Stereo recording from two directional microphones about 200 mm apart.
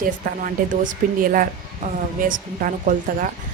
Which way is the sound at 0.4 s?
45° right (ahead or behind).